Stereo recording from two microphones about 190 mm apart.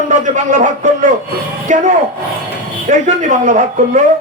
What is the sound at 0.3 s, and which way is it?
Speech, 40° right (ahead or behind).